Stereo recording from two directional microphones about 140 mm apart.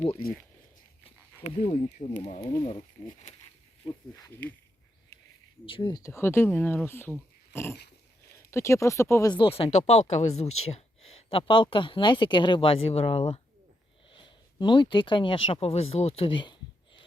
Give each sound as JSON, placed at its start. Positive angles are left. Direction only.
{"t": 1.5, "sound": "speech", "side_deg": 55}
{"t": 2.4, "sound": "speech", "side_deg": 35}
{"t": 3.8, "sound": "speech", "side_deg": 25}
{"t": 5.6, "sound": "speech", "side_deg": 35}
{"t": 6.0, "sound": "speech", "side_deg": 20}
{"t": 9.3, "sound": "speech", "side_deg": 40}
{"t": 11.3, "sound": "speech", "side_deg": 40}